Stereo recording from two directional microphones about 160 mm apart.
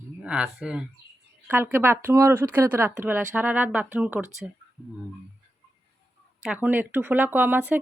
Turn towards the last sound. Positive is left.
turn(degrees=-10)  # may be behind; listen again after turning